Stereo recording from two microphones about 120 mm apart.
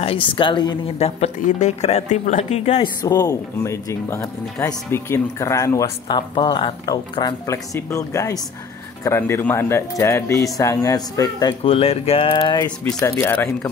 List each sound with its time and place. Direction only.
0.0 s speech: 50° left (ahead or behind)
0.9 s speech: 60° left (ahead or behind)
2.8 s speech: 35° left (ahead or behind)
6.0 s speech: 40° left (ahead or behind)
7.4 s speech: 25° left (ahead or behind)
11.6 s speech: 50° left (ahead or behind)
12.8 s speech: 20° left (ahead or behind)